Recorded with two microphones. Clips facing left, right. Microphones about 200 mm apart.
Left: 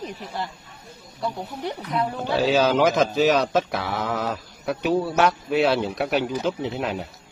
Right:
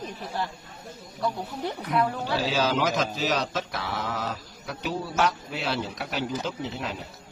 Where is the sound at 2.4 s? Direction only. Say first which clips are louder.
Left 7 dB; 60° left (ahead or behind).